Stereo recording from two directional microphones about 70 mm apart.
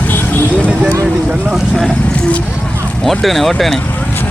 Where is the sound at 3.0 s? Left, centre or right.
Centre.